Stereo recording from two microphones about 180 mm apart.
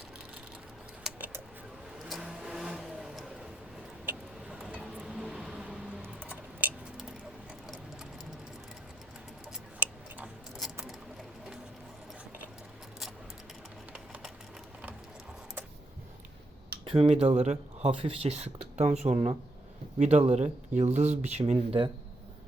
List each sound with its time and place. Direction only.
1.0 s a sound: 10° right (ahead or behind)
2.0 s vehicle: centre (ahead or behind)
4.7 s keys jangling: 5° right (ahead or behind)
9.5 s tick-tock: 5° right (ahead or behind)
13.9 s a sound: 5° right (ahead or behind)
16.8 s speech: 30° right (ahead or behind)